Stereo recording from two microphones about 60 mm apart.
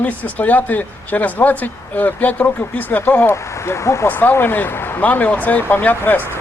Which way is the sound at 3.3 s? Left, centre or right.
Left.